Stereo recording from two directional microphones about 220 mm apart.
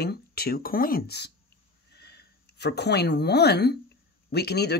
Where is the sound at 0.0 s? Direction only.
45° left (ahead or behind).